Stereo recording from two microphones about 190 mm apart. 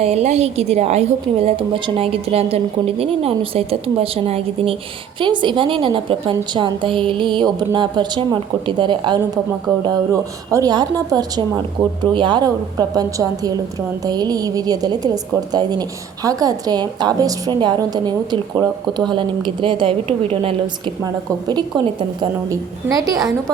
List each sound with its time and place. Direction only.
0.0 s a woman's voice: 35° right (ahead or behind); by 23.3 s 20° right (ahead or behind)